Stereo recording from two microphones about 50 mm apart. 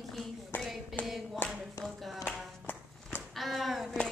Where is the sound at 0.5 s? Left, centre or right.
Left.